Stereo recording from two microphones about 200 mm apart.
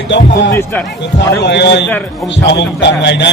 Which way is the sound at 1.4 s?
60° left (ahead or behind).